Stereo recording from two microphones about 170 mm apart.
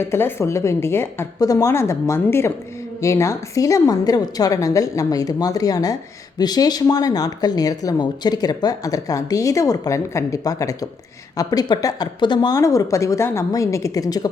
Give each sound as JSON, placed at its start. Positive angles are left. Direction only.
{"t": 0.0, "sound": "a woman's voice", "side_deg": 15}